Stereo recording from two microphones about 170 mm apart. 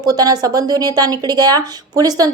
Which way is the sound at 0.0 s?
20° right (ahead or behind).